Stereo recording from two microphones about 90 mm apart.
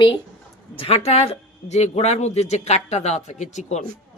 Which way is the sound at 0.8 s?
90° left.